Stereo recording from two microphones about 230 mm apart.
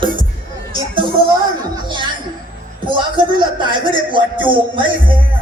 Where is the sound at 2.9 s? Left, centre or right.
Right.